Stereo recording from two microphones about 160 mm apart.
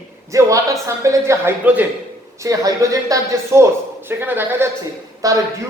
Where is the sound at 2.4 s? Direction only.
20° right (ahead or behind).